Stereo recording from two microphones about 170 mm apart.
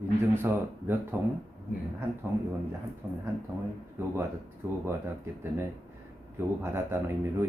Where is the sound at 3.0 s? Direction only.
5° right (ahead or behind).